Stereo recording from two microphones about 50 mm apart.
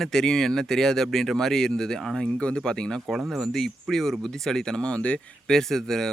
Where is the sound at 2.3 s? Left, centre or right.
Centre.